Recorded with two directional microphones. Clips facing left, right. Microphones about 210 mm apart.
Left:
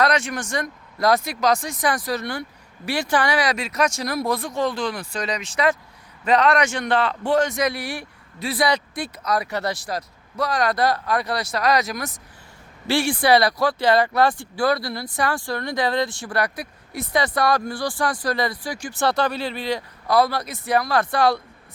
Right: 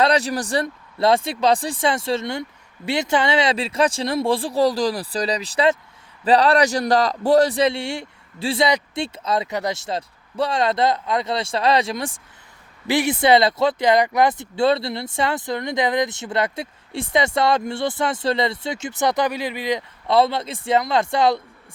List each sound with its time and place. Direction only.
0.0 s a man's voice: 35° right (ahead or behind)